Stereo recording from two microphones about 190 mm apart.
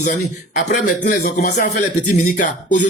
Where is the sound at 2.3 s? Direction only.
40° left (ahead or behind).